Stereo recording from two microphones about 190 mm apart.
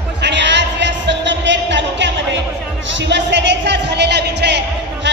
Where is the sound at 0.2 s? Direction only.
70° right (ahead or behind).